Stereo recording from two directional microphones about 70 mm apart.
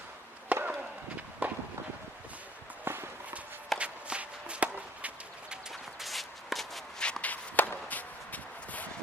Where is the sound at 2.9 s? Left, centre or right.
Right.